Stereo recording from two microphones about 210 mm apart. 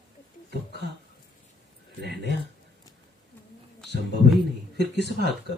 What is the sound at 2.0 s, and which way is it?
Mantra, 50° right (ahead or behind).